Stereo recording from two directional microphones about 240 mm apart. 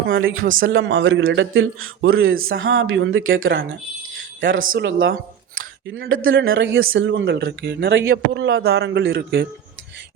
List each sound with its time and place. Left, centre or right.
0.0 s speech: right